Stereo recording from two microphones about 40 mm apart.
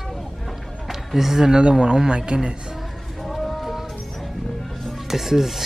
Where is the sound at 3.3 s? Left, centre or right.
Centre.